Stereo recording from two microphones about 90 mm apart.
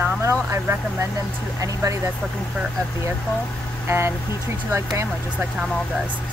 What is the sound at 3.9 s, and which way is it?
Speech, 30° right (ahead or behind).